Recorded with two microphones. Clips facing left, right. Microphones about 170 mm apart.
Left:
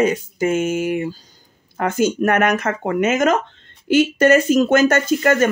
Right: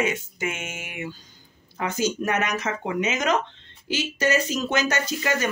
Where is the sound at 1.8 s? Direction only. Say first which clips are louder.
Left 7 dB; 55° left (ahead or behind).